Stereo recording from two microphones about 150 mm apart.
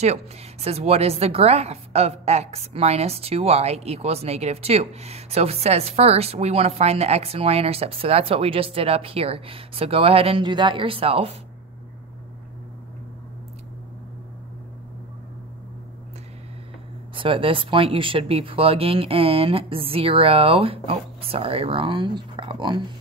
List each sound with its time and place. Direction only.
0.0 s a woman's voice: 45° right (ahead or behind)
17.1 s speech: 35° right (ahead or behind)